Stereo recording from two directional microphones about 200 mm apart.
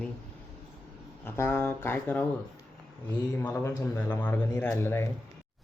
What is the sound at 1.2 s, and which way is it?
Speech, 10° left (ahead or behind).